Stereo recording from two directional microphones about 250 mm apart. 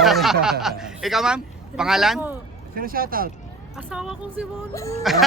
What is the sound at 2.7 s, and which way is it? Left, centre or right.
Speech, right.